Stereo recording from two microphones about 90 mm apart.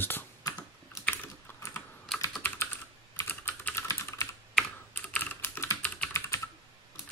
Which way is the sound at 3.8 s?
35° left (ahead or behind).